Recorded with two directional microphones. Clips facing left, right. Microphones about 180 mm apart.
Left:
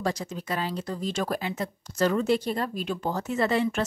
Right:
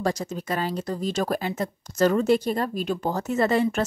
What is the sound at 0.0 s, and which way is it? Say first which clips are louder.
Speech: right 3 dB; 45° right (ahead or behind).